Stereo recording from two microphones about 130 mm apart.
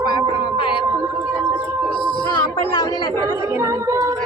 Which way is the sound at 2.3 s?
30° left (ahead or behind).